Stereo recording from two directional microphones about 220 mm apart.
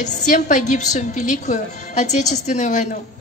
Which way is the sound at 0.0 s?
35° left (ahead or behind).